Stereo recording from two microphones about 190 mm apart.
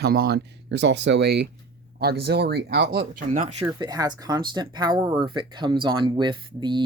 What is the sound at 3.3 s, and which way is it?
Speech, 40° right (ahead or behind).